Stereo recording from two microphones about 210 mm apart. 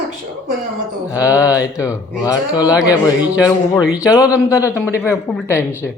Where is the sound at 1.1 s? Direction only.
15° left (ahead or behind).